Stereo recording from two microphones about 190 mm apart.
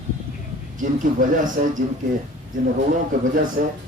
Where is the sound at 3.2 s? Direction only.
45° right (ahead or behind).